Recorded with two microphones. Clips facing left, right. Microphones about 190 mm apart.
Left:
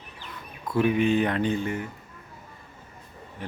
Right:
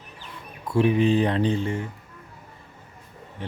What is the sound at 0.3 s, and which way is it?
Speech, 30° right (ahead or behind).